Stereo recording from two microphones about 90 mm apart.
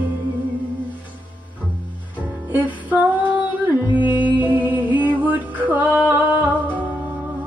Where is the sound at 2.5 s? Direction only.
20° right (ahead or behind).